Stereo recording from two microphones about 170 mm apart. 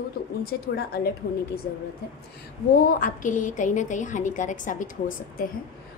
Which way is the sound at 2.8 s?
50° left (ahead or behind).